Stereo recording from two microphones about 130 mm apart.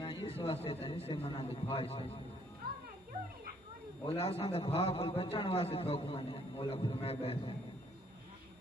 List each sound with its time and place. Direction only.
0.0 s a sound: 40° left (ahead or behind)
0.7 s a man's voice: 45° left (ahead or behind)
4.1 s a man's voice: 50° left (ahead or behind)